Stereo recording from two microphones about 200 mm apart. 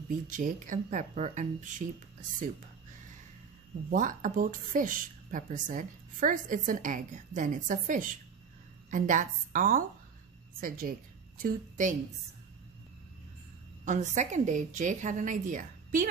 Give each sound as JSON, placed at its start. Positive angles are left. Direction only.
{"t": 0.3, "sound": "a woman's voice", "side_deg": -40}
{"t": 3.9, "sound": "a woman's voice", "side_deg": -40}
{"t": 13.8, "sound": "a woman's voice", "side_deg": -35}